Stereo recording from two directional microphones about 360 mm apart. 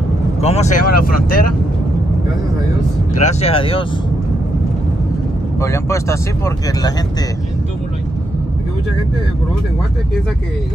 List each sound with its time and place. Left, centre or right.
0.4 s speech: centre
3.2 s speech: centre
5.6 s speech: centre